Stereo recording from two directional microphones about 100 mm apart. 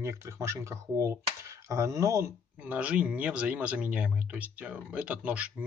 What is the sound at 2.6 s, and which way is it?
Speech, 15° right (ahead or behind).